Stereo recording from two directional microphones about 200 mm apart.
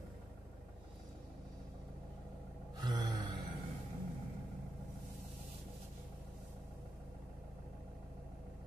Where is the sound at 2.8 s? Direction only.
20° right (ahead or behind).